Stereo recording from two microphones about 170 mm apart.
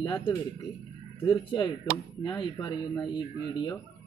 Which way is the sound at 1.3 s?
25° left (ahead or behind).